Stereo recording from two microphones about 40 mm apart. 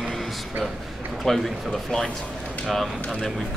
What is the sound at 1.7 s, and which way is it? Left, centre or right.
Speech, centre.